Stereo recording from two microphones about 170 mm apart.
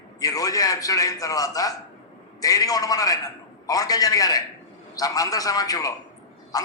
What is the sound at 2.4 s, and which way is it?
A man's voice, 20° left (ahead or behind).